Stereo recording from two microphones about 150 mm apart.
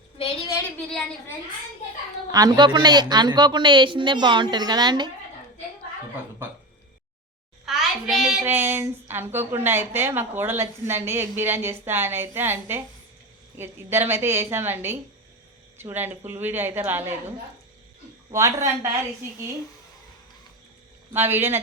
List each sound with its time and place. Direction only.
0.2 s a sound: 40° left (ahead or behind)
0.9 s a woman's voice: 5° left (ahead or behind)
2.3 s a woman's voice: 25° right (ahead or behind)
7.6 s a sound: 5° right (ahead or behind)
8.4 s a woman's voice: 15° right (ahead or behind)
18.3 s a woman's voice: 20° right (ahead or behind)
21.1 s a woman's voice: 15° right (ahead or behind)